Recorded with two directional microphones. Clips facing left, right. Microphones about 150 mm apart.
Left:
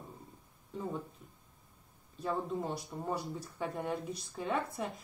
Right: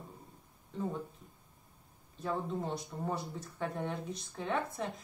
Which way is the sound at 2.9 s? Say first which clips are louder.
Even; 10° left (ahead or behind).